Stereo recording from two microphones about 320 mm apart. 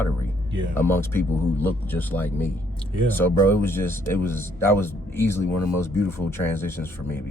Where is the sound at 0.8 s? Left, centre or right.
Centre.